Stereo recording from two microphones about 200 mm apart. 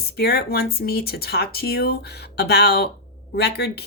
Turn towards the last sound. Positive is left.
turn(degrees=55)  # may be behind; listen again after turning